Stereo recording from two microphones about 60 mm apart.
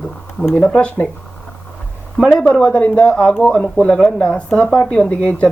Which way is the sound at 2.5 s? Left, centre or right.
Left.